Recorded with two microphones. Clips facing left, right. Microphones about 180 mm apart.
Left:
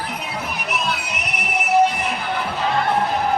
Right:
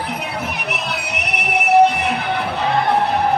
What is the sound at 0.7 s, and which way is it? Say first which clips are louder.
Music: even; 65° right (ahead or behind).